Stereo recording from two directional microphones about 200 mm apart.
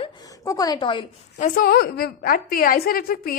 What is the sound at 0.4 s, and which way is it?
A woman's voice, 20° left (ahead or behind).